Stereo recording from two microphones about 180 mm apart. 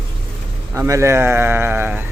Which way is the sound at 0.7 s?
15° right (ahead or behind).